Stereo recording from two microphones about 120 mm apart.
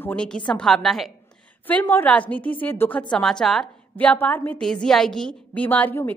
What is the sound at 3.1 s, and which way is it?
A woman's voice, 5° left (ahead or behind).